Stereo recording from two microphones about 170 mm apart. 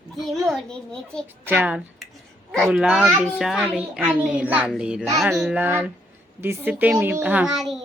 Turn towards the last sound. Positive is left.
turn(degrees=0)  # may be behind; listen again after turning